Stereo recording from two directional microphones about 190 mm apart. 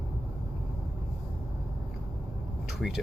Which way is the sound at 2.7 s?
Centre (ahead or behind).